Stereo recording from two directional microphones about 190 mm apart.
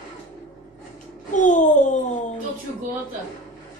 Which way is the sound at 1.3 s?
40° left (ahead or behind).